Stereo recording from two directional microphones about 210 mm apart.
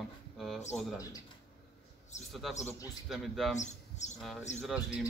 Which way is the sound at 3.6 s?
35° left (ahead or behind).